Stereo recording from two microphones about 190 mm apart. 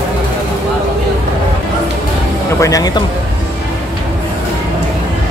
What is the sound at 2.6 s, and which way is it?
Speech, 20° left (ahead or behind).